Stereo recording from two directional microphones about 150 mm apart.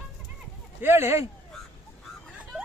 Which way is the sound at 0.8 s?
15° right (ahead or behind).